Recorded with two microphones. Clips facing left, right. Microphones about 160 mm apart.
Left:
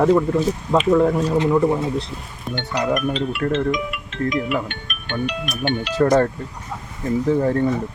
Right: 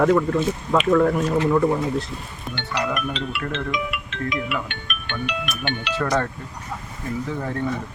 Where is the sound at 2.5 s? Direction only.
45° left (ahead or behind).